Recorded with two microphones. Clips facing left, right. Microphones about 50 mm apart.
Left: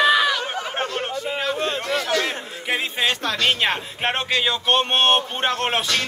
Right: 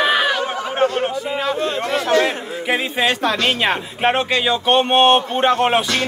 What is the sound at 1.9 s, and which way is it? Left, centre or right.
Speech, right.